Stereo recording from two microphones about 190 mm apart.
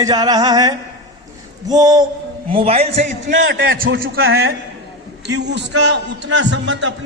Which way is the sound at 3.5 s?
55° right (ahead or behind).